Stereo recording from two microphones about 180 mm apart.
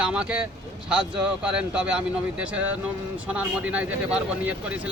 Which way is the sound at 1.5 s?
5° right (ahead or behind).